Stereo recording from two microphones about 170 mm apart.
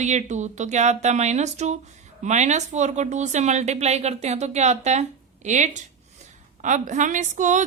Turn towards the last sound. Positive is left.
turn(degrees=-45)  # may be behind; listen again after turning